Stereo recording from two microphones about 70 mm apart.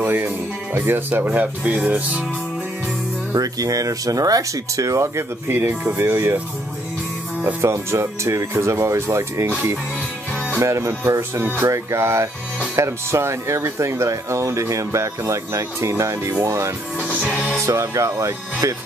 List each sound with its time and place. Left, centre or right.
0.0 s music: right
0.7 s speech: right
3.3 s speech: right
7.6 s speech: right
10.6 s speech: right